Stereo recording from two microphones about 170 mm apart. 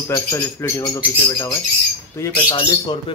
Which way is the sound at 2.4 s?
25° left (ahead or behind).